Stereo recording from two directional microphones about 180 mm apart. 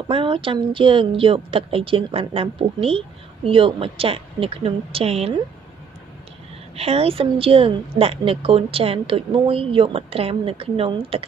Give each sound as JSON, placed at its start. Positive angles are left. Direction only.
{"t": 0.1, "sound": "a woman's voice", "side_deg": -30}
{"t": 6.8, "sound": "a woman's voice", "side_deg": -35}